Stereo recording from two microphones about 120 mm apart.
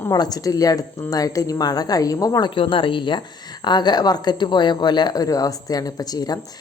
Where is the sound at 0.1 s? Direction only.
35° left (ahead or behind).